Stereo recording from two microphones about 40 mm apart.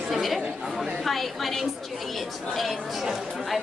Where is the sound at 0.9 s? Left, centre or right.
Centre.